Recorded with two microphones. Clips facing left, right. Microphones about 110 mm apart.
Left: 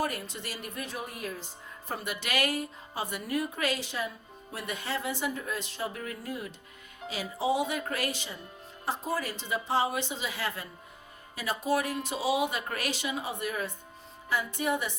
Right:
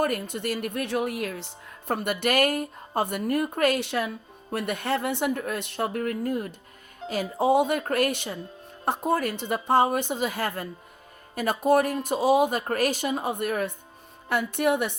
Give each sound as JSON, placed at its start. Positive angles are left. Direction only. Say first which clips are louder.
{"t": 0.0, "sound": "a woman's voice", "louder": "right 7 dB", "side_deg": -55}